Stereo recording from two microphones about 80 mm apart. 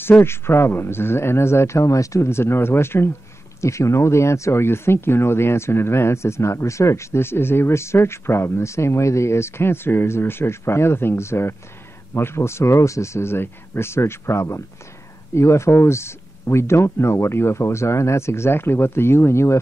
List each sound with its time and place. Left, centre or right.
0.2 s speech: left